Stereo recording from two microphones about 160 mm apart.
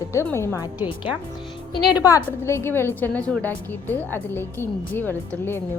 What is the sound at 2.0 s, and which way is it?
A woman's voice, 20° left (ahead or behind).